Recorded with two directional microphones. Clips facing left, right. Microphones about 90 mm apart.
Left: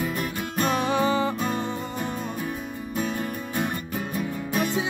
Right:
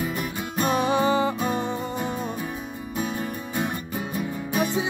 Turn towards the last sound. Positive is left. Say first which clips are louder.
# right 1 dB
turn(degrees=-5)  # may be behind; listen again after turning